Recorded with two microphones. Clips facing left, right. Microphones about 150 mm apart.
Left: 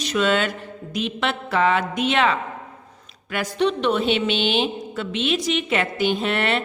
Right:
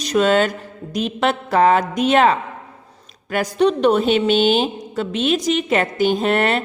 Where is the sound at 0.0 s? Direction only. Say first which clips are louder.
Right 5 dB; 40° right (ahead or behind).